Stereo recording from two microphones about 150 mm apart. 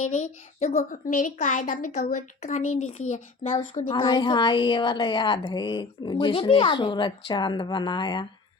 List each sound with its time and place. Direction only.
0.0 s a child's voice: 55° left (ahead or behind)
3.8 s a woman's voice: 35° left (ahead or behind)